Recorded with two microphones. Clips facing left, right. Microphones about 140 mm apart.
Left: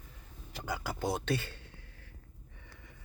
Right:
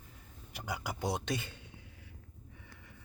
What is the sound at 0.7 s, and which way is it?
Speech, 15° right (ahead or behind).